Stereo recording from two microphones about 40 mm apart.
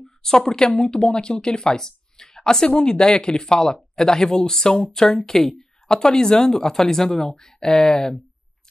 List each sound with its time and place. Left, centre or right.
0.4 s speech: centre